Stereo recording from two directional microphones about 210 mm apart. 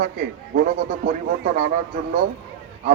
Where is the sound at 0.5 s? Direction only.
40° right (ahead or behind).